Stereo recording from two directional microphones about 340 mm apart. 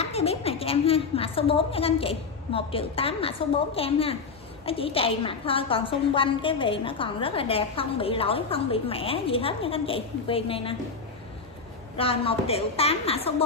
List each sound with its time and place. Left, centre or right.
0.0 s a woman's voice: centre
12.0 s a woman's voice: centre